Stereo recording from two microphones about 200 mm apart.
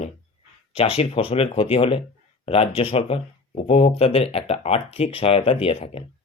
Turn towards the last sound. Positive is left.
turn(degrees=30)  # may be behind; listen again after turning